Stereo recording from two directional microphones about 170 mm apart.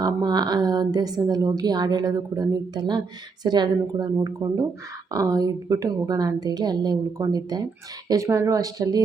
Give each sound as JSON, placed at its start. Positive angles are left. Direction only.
{"t": 0.0, "sound": "a woman's voice", "side_deg": -25}